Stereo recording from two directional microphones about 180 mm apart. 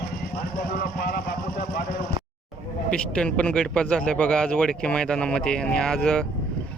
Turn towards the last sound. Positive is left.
turn(degrees=5)  # may be behind; listen again after turning